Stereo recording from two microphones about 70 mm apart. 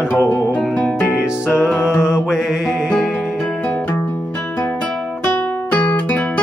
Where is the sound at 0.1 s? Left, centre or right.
Left.